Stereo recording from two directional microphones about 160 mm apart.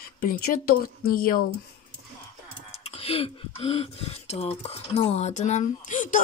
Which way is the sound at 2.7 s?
40° left (ahead or behind).